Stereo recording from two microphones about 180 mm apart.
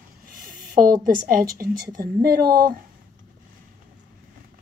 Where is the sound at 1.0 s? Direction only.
50° right (ahead or behind).